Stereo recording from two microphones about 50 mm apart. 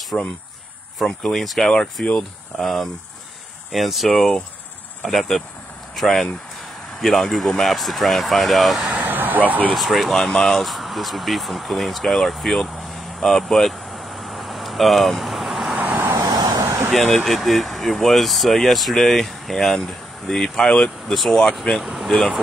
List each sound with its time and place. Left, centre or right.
0.1 s speech: centre
1.0 s speech: centre
2.0 s speech: centre
2.6 s speech: centre
8.9 s vehicle: right
9.8 s speech: centre
12.6 s vehicle: centre
15.8 s vehicle: right
16.1 s vehicle: right
16.9 s speech: centre